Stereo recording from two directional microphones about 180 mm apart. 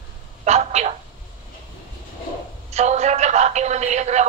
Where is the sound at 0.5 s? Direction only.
40° right (ahead or behind).